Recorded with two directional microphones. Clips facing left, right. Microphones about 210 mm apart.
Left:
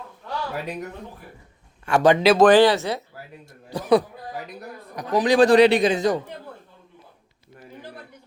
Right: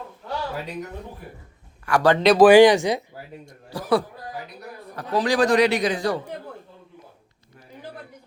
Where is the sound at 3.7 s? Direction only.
20° left (ahead or behind).